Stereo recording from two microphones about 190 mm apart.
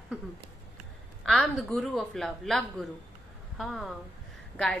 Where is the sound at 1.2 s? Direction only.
Centre (ahead or behind).